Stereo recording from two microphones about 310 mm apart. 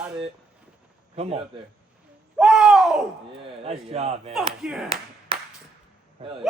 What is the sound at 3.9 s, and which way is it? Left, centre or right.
Speech, centre.